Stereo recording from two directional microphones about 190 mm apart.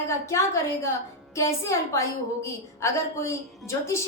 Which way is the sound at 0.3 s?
15° left (ahead or behind).